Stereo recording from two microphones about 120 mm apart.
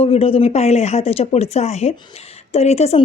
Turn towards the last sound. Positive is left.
turn(degrees=60)  # may be behind; listen again after turning